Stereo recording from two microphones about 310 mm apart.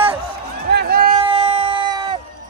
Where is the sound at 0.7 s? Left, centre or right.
Right.